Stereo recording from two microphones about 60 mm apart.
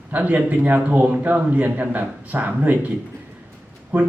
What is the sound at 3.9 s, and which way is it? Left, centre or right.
Speech, right.